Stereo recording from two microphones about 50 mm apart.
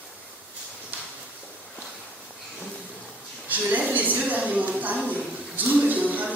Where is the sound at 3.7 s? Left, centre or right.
Right.